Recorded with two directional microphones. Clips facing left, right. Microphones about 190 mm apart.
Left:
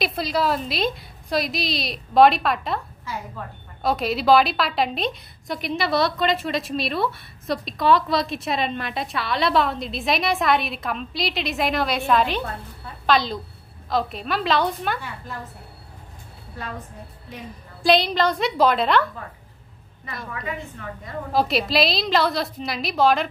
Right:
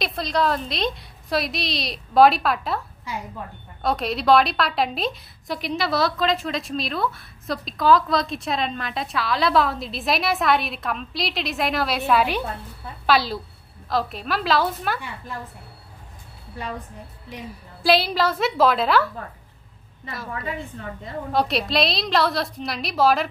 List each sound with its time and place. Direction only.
0.0 s a woman's voice: 5° left (ahead or behind)
3.8 s a woman's voice: centre (ahead or behind)
17.8 s a woman's voice: 5° right (ahead or behind)
20.4 s a woman's voice: 30° right (ahead or behind)
21.3 s a woman's voice: centre (ahead or behind)